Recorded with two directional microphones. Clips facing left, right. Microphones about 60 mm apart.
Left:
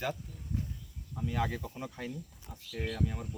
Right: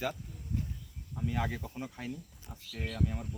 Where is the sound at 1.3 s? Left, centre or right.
Centre.